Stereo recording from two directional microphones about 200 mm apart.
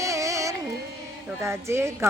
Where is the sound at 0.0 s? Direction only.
15° right (ahead or behind).